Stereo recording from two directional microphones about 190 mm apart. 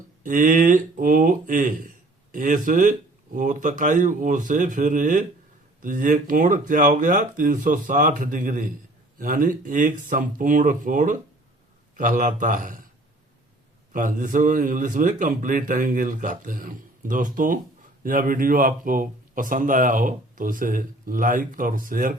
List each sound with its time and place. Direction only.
0.2 s a man's voice: 40° right (ahead or behind)
13.9 s a man's voice: 45° right (ahead or behind)